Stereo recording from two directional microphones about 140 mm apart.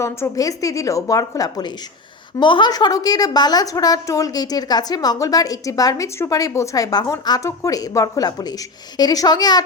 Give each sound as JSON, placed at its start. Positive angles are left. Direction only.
{"t": 0.0, "sound": "a woman's voice", "side_deg": 25}